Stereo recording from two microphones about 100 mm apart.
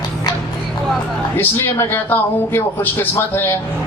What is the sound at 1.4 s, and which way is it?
A man's voice, 25° left (ahead or behind).